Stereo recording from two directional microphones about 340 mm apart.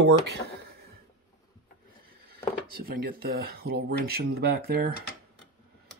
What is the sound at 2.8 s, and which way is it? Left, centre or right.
Speech, right.